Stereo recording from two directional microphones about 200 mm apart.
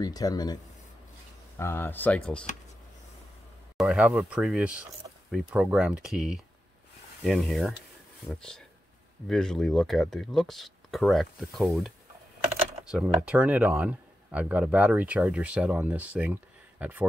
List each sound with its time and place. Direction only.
0.0 s speech: 20° left (ahead or behind)
1.6 s speech: 10° left (ahead or behind)
3.7 s speech: 5° right (ahead or behind)